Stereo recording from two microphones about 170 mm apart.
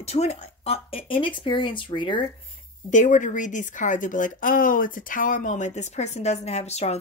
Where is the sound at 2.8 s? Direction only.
45° left (ahead or behind).